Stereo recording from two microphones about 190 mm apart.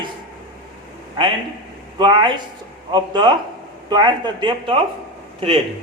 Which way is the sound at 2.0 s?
25° right (ahead or behind).